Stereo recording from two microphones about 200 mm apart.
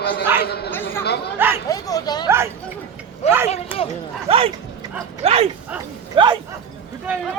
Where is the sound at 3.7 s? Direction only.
10° right (ahead or behind).